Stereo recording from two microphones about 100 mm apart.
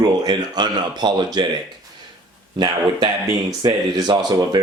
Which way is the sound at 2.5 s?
45° right (ahead or behind).